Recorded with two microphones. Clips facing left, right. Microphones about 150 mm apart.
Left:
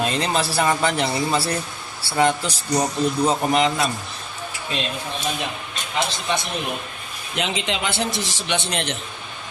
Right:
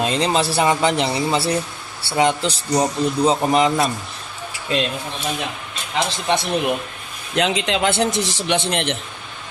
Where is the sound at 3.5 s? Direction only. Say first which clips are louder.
Right 3 dB; 35° right (ahead or behind).